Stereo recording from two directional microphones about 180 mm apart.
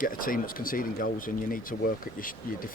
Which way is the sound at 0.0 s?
50° left (ahead or behind).